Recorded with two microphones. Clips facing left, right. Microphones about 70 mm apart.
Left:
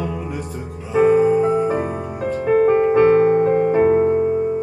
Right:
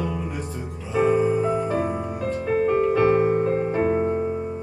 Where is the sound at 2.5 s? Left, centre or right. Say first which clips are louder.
Left 6 dB; left.